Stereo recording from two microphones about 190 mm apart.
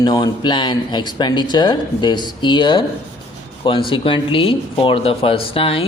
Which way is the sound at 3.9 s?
25° left (ahead or behind).